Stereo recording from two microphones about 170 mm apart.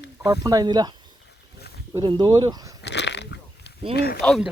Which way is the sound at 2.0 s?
25° right (ahead or behind).